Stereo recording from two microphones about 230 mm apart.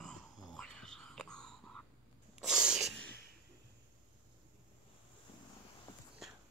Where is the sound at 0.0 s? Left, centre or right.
Centre.